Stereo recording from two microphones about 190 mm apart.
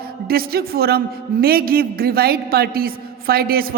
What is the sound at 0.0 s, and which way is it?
A woman's voice, 50° right (ahead or behind).